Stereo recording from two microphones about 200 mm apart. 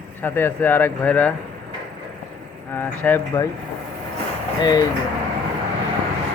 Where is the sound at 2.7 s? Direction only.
10° left (ahead or behind).